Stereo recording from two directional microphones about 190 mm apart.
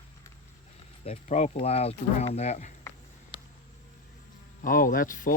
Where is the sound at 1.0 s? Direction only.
35° left (ahead or behind).